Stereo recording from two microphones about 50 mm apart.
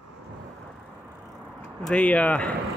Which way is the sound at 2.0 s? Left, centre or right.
Left.